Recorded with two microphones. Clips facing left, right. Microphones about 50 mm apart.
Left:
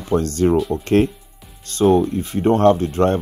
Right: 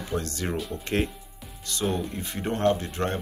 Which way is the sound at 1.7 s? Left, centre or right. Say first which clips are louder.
Left 10 dB; left.